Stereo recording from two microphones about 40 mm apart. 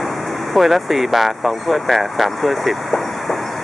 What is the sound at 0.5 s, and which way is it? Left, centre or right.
Speech, centre.